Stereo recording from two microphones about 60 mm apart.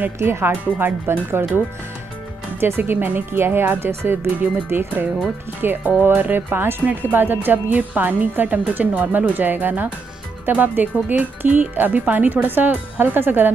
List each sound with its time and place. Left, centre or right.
0.2 s a woman's voice: right
2.8 s a woman's voice: right